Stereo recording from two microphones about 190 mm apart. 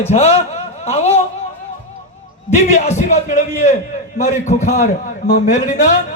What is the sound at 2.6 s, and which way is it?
A man's voice, 40° left (ahead or behind).